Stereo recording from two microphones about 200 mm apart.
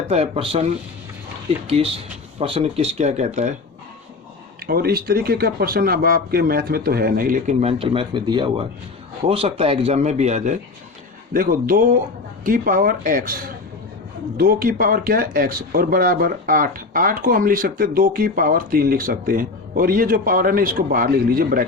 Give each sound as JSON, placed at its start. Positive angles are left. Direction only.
{"t": 0.1, "sound": "speech", "side_deg": -30}
{"t": 1.6, "sound": "a man's voice", "side_deg": -30}
{"t": 4.6, "sound": "a man's voice", "side_deg": -50}